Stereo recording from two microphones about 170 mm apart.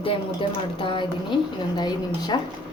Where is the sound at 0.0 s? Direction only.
30° left (ahead or behind).